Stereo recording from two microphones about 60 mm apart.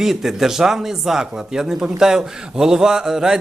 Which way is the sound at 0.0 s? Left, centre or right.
Centre.